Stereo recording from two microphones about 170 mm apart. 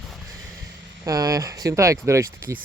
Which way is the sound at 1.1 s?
20° right (ahead or behind).